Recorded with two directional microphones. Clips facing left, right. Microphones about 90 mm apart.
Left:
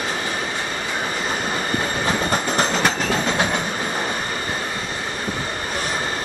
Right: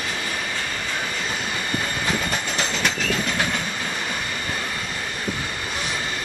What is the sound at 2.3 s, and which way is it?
Train, 40° left (ahead or behind).